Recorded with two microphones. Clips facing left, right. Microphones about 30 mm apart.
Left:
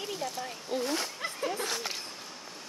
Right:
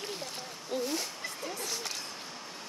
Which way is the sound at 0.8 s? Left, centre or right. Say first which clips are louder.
Left 3 dB; left.